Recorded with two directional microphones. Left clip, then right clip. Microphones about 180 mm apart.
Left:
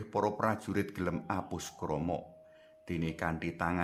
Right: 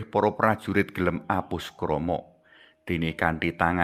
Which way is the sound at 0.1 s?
25° right (ahead or behind).